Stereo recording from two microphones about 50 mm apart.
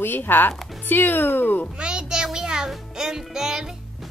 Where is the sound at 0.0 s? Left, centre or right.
Left.